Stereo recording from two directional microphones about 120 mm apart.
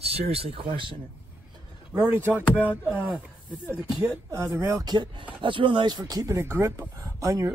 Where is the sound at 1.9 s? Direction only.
15° right (ahead or behind).